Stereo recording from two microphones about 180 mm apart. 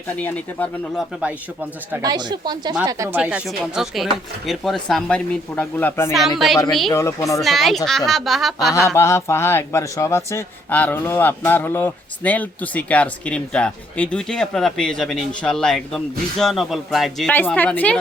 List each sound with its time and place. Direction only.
0.2 s a man's voice: 10° left (ahead or behind)
1.9 s speech: 20° right (ahead or behind)
3.2 s speech: 5° right (ahead or behind); by 6.1 s 10° left (ahead or behind)
6.1 s speech: centre (ahead or behind)
6.9 s a man's voice: 15° left (ahead or behind)
7.4 s speech: centre (ahead or behind)
9.0 s a man's voice: 15° left (ahead or behind)